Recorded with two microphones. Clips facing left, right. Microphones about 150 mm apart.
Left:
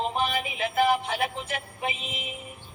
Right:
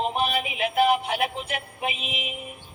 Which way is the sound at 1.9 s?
75° right (ahead or behind).